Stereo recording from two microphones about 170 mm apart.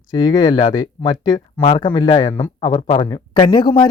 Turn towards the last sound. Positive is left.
turn(degrees=30)  # may be behind; listen again after turning